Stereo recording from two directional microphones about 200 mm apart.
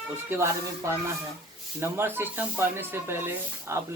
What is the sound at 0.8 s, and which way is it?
Speech, 15° right (ahead or behind).